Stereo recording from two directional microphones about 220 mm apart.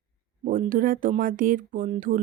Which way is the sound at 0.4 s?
40° right (ahead or behind).